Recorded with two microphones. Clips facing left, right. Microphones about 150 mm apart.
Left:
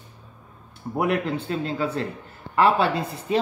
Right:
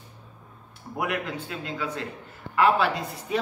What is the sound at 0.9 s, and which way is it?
A man's voice, 30° left (ahead or behind).